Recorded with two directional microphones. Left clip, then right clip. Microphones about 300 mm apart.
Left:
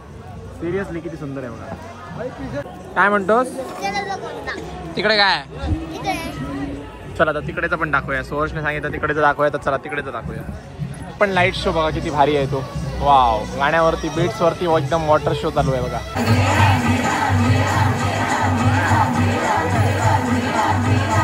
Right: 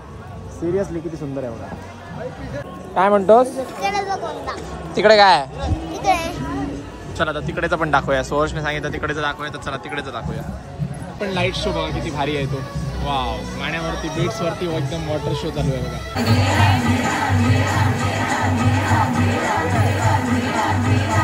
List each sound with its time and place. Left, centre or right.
2.5 s a man's voice: centre
5.0 s speech: centre
7.2 s a man's voice: centre
11.6 s speech: centre
13.6 s speech: centre
13.8 s speech: centre
16.2 s music: centre